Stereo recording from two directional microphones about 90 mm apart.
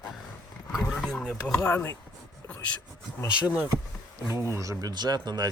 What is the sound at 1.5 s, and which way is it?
Speech, 25° left (ahead or behind).